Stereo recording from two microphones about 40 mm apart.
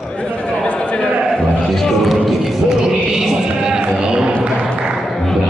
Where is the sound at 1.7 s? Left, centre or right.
Centre.